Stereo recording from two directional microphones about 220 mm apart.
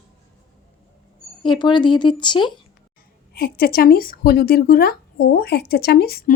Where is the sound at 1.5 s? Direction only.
20° left (ahead or behind).